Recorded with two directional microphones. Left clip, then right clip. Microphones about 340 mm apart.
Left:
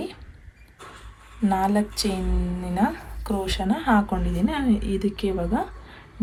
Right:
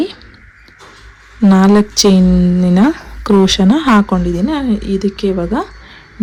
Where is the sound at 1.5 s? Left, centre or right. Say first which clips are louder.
Right 11 dB; centre.